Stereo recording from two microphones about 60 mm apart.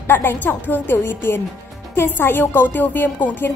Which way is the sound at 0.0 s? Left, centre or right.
Left.